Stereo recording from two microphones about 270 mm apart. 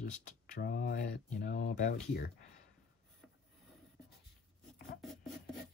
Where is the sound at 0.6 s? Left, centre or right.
Left.